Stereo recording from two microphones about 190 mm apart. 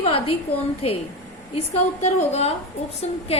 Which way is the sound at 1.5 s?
35° left (ahead or behind).